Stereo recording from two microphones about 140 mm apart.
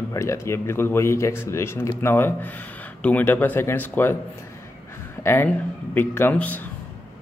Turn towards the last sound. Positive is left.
turn(degrees=10)  # may be behind; listen again after turning